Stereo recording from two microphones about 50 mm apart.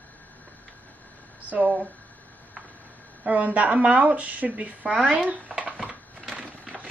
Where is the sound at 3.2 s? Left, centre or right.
Right.